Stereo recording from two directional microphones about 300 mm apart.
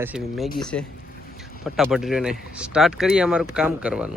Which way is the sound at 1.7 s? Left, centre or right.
Centre.